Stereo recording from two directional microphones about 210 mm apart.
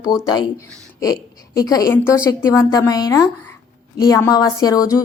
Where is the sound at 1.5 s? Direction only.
15° left (ahead or behind).